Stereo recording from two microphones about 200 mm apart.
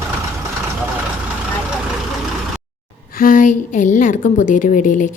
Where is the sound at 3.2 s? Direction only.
45° left (ahead or behind).